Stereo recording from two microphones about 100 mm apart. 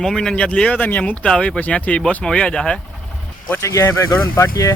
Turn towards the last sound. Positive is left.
turn(degrees=30)  # may be behind; listen again after turning